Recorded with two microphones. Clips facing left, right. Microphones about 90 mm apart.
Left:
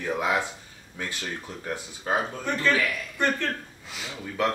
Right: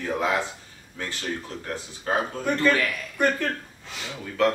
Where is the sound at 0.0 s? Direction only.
15° left (ahead or behind).